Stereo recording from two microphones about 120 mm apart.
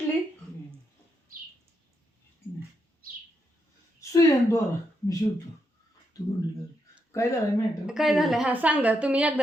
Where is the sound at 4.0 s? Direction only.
25° left (ahead or behind).